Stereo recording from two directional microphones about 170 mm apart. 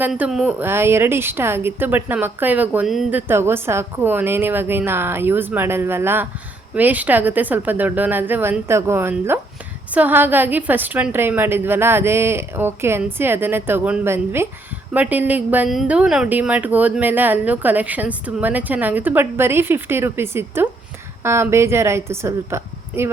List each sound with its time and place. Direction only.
0.0 s speech: 5° right (ahead or behind)